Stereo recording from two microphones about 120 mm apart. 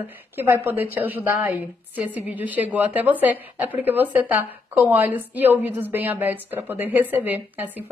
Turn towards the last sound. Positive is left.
turn(degrees=-15)  # may be behind; listen again after turning